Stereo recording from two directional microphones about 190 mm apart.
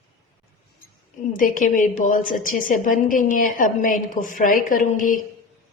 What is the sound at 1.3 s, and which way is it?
A woman's voice, 45° left (ahead or behind).